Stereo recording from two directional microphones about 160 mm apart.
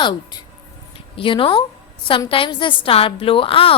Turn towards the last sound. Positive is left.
turn(degrees=35)  # may be behind; listen again after turning